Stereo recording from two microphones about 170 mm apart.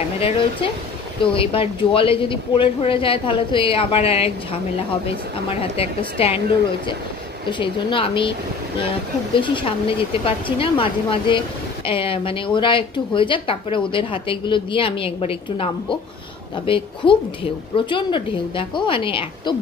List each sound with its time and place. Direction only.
0.2 s speech: 30° left (ahead or behind)
5.8 s speech: 35° left (ahead or behind)
7.4 s speech: 30° left (ahead or behind)
9.3 s speech: 30° left (ahead or behind)